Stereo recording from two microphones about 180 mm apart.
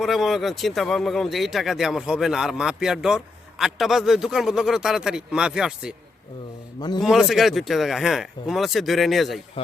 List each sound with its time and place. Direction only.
0.0 s speech: centre (ahead or behind)
6.7 s a man's voice: 25° left (ahead or behind)
7.0 s speech: centre (ahead or behind)